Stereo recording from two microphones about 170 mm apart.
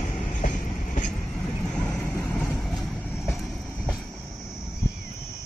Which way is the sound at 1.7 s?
5° left (ahead or behind).